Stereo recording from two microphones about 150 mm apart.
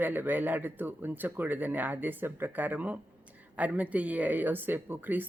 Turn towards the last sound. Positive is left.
turn(degrees=-10)  # may be behind; listen again after turning